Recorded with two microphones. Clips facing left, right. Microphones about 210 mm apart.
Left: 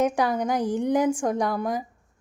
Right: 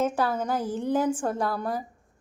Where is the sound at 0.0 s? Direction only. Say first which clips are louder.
Left 3 dB; 15° left (ahead or behind).